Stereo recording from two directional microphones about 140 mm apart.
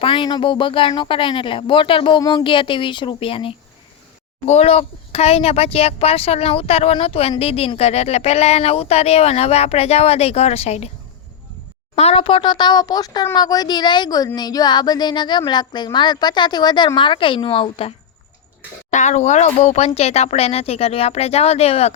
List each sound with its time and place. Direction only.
0.0 s speech: 35° left (ahead or behind)
11.9 s speech: 45° left (ahead or behind)
18.9 s speech: 60° left (ahead or behind)